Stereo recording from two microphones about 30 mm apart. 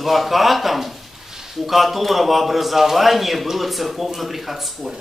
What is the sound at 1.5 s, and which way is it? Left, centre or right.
A man's voice, centre.